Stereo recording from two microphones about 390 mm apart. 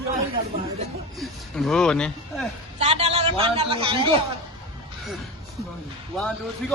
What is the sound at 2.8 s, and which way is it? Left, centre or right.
A man's voice, centre.